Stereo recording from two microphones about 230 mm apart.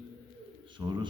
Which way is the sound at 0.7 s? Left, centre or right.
Centre.